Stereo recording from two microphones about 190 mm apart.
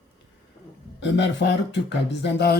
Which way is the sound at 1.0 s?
70° left (ahead or behind).